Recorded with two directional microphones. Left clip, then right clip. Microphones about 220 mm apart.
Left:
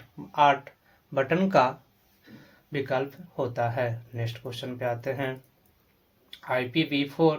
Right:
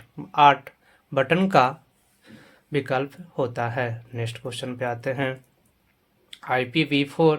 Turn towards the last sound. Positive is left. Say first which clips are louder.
# right 4 dB
turn(degrees=-45)  # may be behind; listen again after turning